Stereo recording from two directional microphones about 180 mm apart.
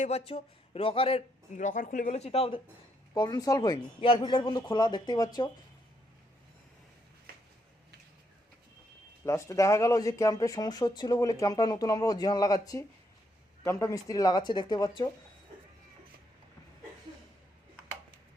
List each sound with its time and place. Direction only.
0.0 s speech: 35° left (ahead or behind)
3.2 s speech: 20° left (ahead or behind)
9.2 s speech: 15° left (ahead or behind)